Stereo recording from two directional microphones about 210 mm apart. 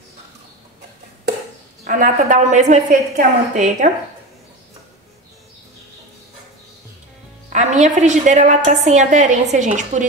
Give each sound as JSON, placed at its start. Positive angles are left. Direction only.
{"t": 1.9, "sound": "a woman's voice", "side_deg": -40}
{"t": 7.4, "sound": "a woman's voice", "side_deg": -35}